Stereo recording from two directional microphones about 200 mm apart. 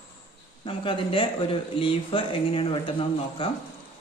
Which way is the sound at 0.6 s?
25° left (ahead or behind).